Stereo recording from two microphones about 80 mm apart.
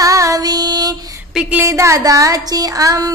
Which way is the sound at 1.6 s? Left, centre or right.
Right.